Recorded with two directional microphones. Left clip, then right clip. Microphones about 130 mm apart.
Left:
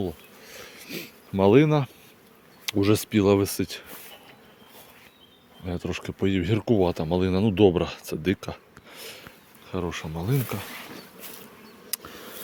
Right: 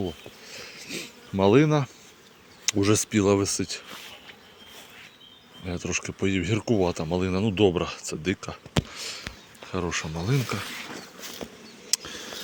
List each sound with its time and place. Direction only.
0.0 s bee: 20° left (ahead or behind)
2.6 s speech: 15° left (ahead or behind); by 3.8 s 30° left (ahead or behind)
5.6 s speech: 25° left (ahead or behind); by 8.5 s 45° left (ahead or behind)
8.9 s a sound: 35° left (ahead or behind)
9.6 s speech: 10° left (ahead or behind)